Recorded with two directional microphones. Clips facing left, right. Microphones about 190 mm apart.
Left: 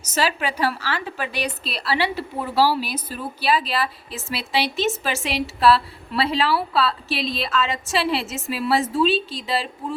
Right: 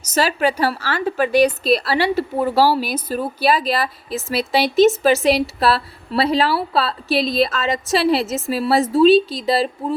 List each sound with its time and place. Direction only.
0.1 s a woman's voice: 45° right (ahead or behind)